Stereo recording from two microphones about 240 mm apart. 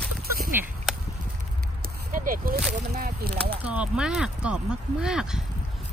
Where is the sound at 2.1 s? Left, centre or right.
Right.